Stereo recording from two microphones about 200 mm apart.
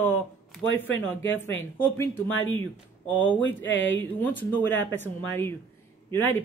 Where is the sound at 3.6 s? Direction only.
70° left (ahead or behind).